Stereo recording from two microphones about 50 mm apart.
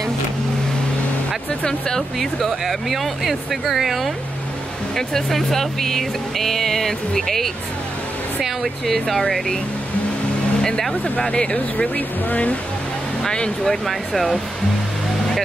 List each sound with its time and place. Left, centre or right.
1.6 s speech: centre
2.1 s speech: centre
10.6 s speech: centre
12.3 s speech: left
13.2 s speech: centre
13.8 s speech: centre